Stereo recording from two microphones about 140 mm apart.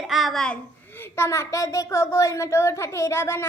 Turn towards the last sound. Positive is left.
turn(degrees=20)  # may be behind; listen again after turning